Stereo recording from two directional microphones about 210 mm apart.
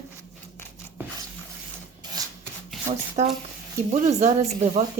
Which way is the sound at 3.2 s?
35° right (ahead or behind).